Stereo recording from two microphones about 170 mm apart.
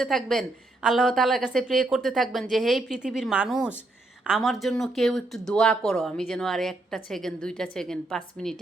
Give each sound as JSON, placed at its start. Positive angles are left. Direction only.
{"t": 0.0, "sound": "speech", "side_deg": 0}